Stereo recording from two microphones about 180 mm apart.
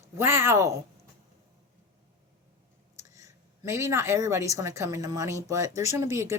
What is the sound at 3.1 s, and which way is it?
A woman's voice, 15° right (ahead or behind).